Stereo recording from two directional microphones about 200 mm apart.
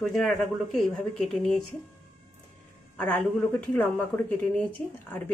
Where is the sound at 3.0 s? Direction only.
10° left (ahead or behind).